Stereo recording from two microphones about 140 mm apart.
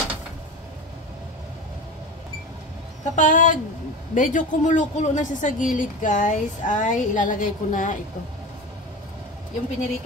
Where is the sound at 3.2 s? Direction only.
70° left (ahead or behind).